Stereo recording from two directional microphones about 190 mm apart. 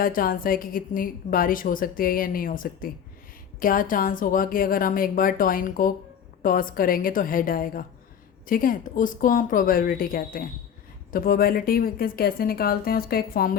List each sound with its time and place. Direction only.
0.0 s a woman's voice: 50° left (ahead or behind)